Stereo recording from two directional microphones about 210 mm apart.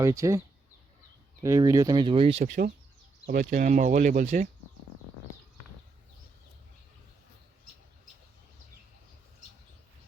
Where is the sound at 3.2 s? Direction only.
40° right (ahead or behind).